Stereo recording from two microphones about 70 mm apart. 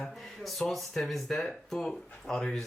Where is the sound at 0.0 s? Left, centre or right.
Centre.